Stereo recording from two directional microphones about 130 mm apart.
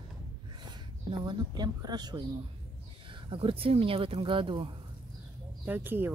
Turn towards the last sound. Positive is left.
turn(degrees=-15)  # may be behind; listen again after turning